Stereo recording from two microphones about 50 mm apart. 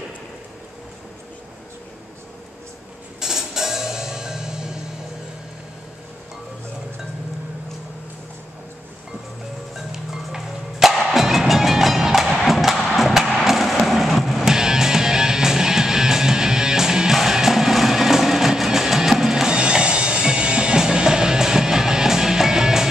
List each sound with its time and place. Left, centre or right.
3.2 s music: centre
9.8 s music: centre